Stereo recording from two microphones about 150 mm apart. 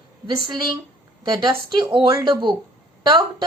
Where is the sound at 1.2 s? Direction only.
30° right (ahead or behind).